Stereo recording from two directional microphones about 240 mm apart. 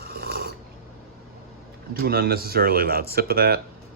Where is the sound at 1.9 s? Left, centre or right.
Right.